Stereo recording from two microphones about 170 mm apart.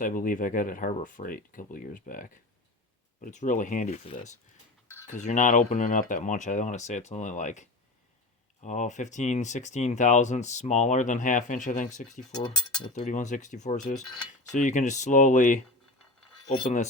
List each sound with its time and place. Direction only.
0.0 s speech: 50° left (ahead or behind)